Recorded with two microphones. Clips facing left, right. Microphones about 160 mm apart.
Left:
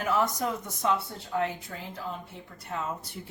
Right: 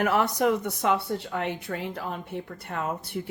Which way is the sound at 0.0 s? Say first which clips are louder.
Right 4 dB; 70° right (ahead or behind).